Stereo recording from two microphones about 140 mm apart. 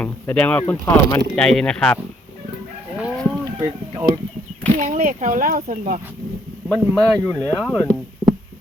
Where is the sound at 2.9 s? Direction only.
5° right (ahead or behind).